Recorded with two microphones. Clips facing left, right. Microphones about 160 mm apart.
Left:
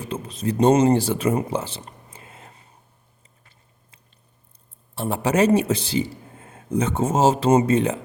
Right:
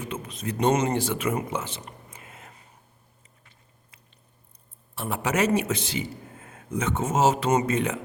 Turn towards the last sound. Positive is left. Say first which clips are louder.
# left 6 dB
turn(degrees=30)  # may be behind; listen again after turning